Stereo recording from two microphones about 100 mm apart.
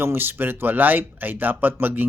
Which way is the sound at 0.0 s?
20° right (ahead or behind).